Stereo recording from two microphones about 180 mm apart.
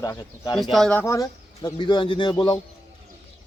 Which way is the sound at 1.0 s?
20° left (ahead or behind).